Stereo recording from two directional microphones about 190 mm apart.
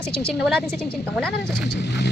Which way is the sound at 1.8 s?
65° left (ahead or behind).